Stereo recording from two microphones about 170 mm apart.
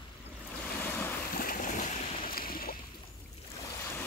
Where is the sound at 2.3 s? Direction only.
60° left (ahead or behind).